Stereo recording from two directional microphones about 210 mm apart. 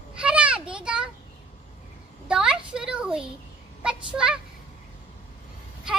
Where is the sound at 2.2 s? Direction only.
5° right (ahead or behind).